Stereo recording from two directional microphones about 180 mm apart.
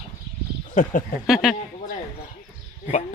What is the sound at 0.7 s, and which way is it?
Speech, 45° left (ahead or behind).